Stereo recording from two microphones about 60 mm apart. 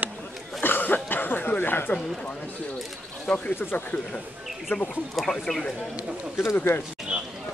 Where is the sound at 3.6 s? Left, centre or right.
Left.